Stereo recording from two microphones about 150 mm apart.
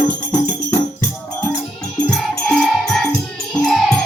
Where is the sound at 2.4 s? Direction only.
5° left (ahead or behind).